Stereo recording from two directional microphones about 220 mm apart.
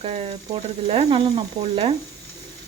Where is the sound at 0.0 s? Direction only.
25° right (ahead or behind).